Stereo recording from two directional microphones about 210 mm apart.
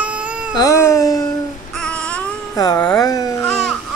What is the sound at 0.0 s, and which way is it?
Baby cry, 5° right (ahead or behind).